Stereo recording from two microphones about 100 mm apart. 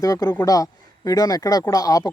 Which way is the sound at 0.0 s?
35° left (ahead or behind).